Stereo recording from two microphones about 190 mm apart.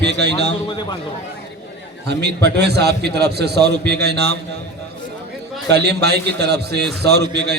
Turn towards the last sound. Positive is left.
turn(degrees=-60)  # may be behind; listen again after turning